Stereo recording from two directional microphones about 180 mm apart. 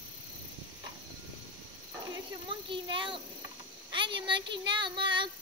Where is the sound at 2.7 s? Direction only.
30° right (ahead or behind).